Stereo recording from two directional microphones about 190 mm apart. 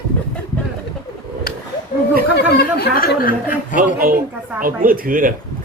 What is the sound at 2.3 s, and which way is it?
Speech, 55° left (ahead or behind).